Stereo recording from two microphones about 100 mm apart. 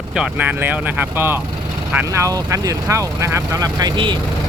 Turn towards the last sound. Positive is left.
turn(degrees=-45)  # may be behind; listen again after turning